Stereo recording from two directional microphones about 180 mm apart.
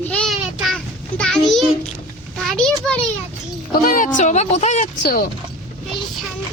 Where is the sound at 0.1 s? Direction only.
5° left (ahead or behind).